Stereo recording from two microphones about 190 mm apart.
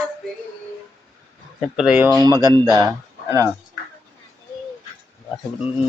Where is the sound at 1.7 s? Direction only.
5° right (ahead or behind).